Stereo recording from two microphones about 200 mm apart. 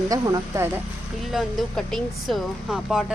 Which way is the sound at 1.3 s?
Centre (ahead or behind).